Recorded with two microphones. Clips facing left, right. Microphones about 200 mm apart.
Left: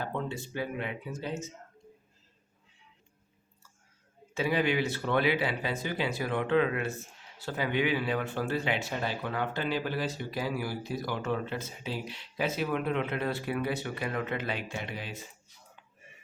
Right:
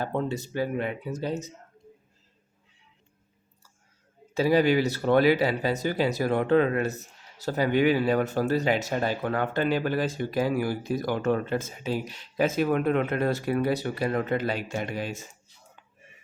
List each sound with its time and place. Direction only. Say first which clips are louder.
0.0 s speech: right 6 dB; 40° right (ahead or behind)
4.4 s speech: right 7 dB; 40° right (ahead or behind)